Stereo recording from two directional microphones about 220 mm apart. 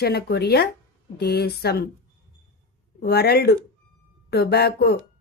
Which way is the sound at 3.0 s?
45° left (ahead or behind).